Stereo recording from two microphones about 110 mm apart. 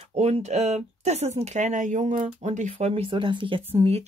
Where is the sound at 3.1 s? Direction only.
50° right (ahead or behind).